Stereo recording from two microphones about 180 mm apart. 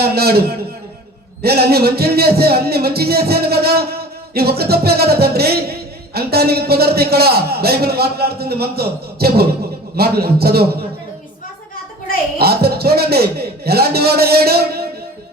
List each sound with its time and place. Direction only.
0.0 s a man's voice: 60° right (ahead or behind)
12.4 s a man's voice: 60° right (ahead or behind)